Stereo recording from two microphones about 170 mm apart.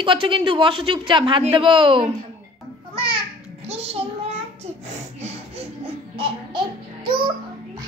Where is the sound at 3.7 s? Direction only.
35° right (ahead or behind).